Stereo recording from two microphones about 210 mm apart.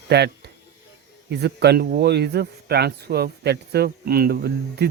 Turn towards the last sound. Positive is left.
turn(degrees=-50)  # may be behind; listen again after turning